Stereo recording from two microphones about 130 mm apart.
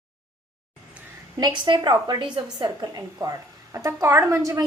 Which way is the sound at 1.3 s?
35° right (ahead or behind).